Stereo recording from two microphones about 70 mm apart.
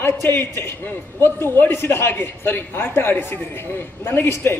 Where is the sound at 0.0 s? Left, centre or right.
Left.